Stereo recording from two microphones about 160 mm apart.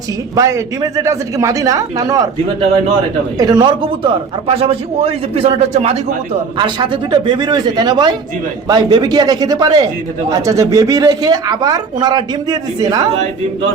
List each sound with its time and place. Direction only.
0.3 s a man's voice: 20° right (ahead or behind)
3.3 s a man's voice: 25° right (ahead or behind); by 6.0 s 40° right (ahead or behind)
6.6 s a man's voice: 30° right (ahead or behind)